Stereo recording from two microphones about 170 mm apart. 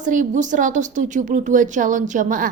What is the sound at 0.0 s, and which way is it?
A woman's voice, 50° right (ahead or behind).